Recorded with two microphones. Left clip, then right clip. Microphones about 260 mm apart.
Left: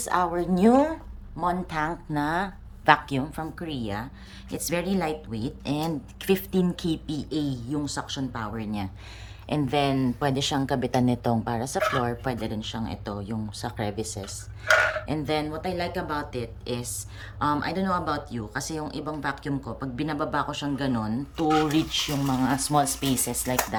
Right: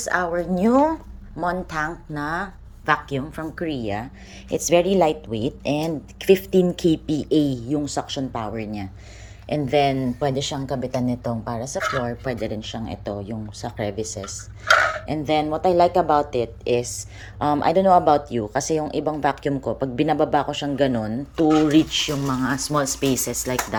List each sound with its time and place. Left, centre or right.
0.0 s a woman's voice: centre
6.7 s a woman's voice: centre